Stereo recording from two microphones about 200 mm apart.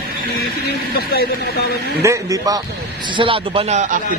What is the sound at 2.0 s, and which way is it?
Speech, 15° right (ahead or behind).